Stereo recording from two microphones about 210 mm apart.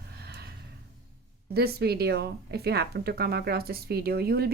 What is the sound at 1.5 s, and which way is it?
A woman's voice, 50° right (ahead or behind).